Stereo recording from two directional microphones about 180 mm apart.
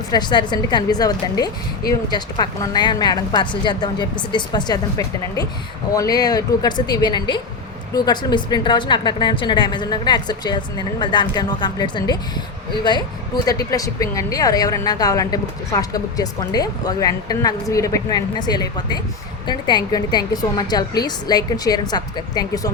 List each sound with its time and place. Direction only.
0.1 s speech: 25° left (ahead or behind)